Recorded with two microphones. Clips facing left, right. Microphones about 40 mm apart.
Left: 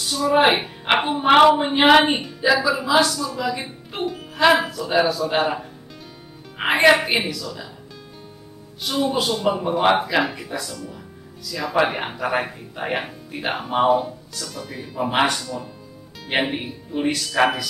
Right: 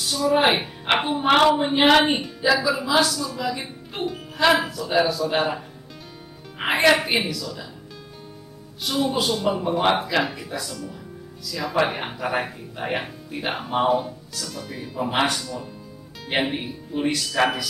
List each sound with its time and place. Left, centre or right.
0.0 s a woman's voice: centre
6.6 s a woman's voice: centre
8.8 s a woman's voice: centre